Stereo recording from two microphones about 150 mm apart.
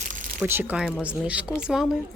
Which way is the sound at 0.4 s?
15° right (ahead or behind).